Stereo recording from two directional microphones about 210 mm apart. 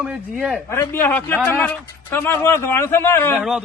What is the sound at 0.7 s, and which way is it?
Speech, 10° left (ahead or behind).